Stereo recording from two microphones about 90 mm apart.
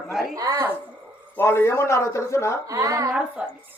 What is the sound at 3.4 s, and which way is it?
Speech, 10° right (ahead or behind).